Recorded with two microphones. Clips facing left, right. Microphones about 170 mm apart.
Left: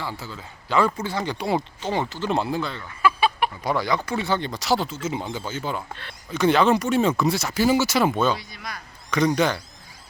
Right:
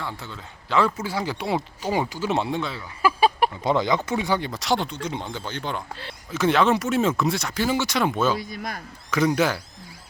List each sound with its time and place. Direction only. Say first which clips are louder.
0.0 s speech: left 1 dB; 5° left (ahead or behind)
3.0 s chicken: right 1 dB; 40° right (ahead or behind)
3.6 s speech: right 2 dB; 20° right (ahead or behind); by 8.4 s centre (ahead or behind)
8.4 s a man's voice: right 6 dB; 50° right (ahead or behind)
9.0 s speech: even; 5° right (ahead or behind)